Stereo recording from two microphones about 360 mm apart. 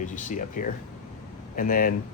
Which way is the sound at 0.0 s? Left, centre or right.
Left.